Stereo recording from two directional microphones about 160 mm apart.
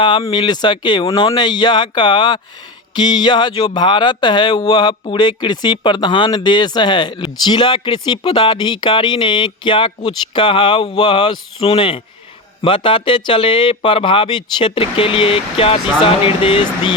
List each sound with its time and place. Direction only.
0.0 s speech: 30° left (ahead or behind)